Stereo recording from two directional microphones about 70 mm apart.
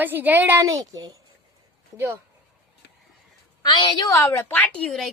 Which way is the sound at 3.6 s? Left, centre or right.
Left.